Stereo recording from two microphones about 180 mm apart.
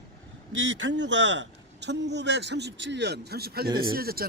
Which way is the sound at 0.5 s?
90° right.